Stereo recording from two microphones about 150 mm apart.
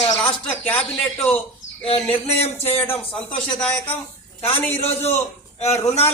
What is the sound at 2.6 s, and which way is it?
Speech, 15° left (ahead or behind).